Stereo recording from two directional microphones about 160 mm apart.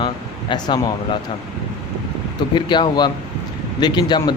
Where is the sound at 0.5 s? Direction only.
30° left (ahead or behind).